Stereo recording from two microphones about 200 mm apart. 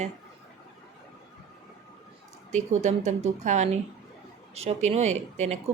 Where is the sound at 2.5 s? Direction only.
35° right (ahead or behind).